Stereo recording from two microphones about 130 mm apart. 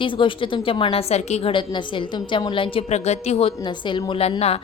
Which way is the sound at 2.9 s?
55° left (ahead or behind).